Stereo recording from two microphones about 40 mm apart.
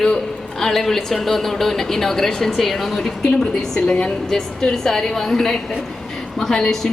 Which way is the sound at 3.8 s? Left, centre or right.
Left.